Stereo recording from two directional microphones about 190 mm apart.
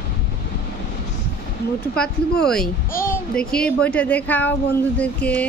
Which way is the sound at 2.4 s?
5° left (ahead or behind).